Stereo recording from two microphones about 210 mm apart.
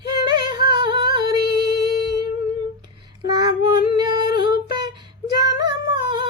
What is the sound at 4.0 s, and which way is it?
Singing, 20° right (ahead or behind).